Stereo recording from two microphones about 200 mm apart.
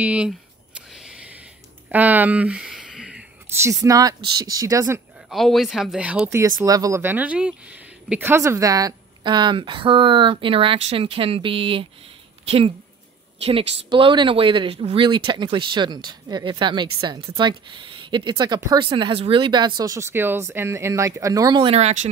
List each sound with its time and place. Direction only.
0.0 s speech: 5° right (ahead or behind)
0.9 s a sound: 5° right (ahead or behind)
3.8 s speech: 15° right (ahead or behind)
5.3 s speech: centre (ahead or behind); by 22.1 s 30° right (ahead or behind)